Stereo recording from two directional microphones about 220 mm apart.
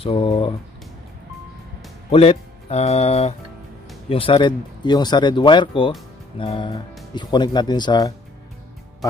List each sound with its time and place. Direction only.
0.0 s speech: 25° left (ahead or behind)
2.0 s speech: 25° left (ahead or behind)